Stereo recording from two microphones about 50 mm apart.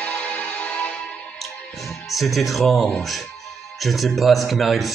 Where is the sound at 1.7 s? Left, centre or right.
Centre.